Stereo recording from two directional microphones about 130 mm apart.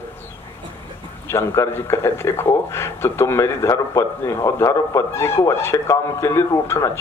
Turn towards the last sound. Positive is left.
turn(degrees=20)  # may be behind; listen again after turning